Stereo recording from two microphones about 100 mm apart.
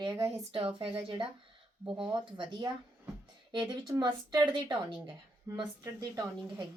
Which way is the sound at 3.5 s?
45° right (ahead or behind).